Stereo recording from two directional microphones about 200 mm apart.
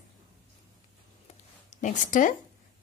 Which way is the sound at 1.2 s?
35° left (ahead or behind).